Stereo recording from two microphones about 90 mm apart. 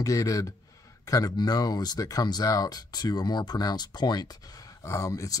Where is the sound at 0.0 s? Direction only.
40° left (ahead or behind).